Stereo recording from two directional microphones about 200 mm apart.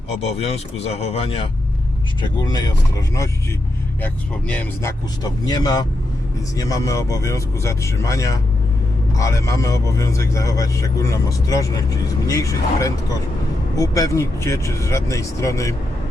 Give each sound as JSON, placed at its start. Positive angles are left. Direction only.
{"t": 0.2, "sound": "speech", "side_deg": 30}
{"t": 2.2, "sound": "speech", "side_deg": 20}
{"t": 4.0, "sound": "speech", "side_deg": 5}